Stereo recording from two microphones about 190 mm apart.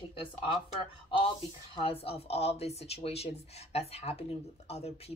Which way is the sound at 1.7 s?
30° left (ahead or behind).